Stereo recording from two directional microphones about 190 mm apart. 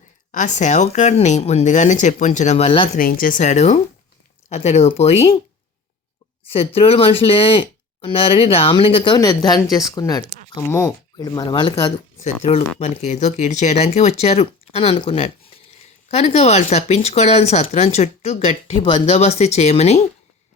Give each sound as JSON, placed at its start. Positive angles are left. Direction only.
{"t": 0.3, "sound": "speech", "side_deg": 40}
{"t": 3.0, "sound": "speech", "side_deg": 50}
{"t": 6.5, "sound": "speech", "side_deg": 30}
{"t": 11.3, "sound": "speech", "side_deg": 25}